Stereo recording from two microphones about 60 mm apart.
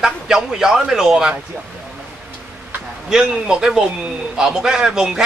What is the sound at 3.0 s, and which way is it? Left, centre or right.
A man's voice, centre.